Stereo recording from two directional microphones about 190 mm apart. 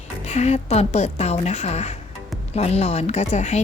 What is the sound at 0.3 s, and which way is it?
A woman's voice, 35° left (ahead or behind).